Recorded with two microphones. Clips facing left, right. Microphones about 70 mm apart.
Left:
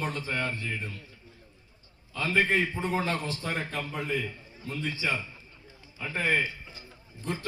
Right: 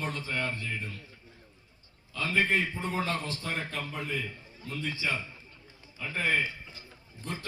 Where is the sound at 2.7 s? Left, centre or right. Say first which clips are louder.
Left 2 dB; left.